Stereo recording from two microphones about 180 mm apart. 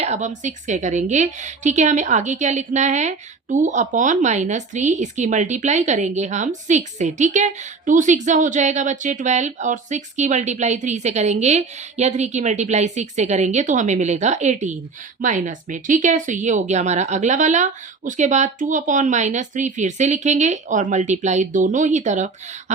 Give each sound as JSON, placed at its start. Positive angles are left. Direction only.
{"t": 0.0, "sound": "a woman's voice", "side_deg": -40}